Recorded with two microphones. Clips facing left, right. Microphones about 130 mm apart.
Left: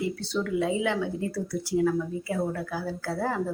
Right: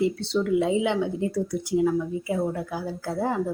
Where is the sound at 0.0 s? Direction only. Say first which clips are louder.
Right 5 dB; 25° right (ahead or behind).